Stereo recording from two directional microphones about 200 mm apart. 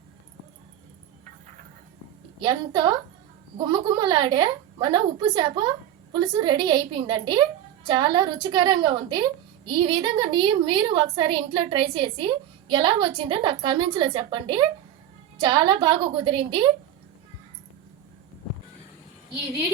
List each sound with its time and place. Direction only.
2.4 s a woman's voice: 20° right (ahead or behind)